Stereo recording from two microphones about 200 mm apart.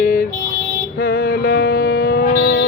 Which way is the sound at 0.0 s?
45° left (ahead or behind).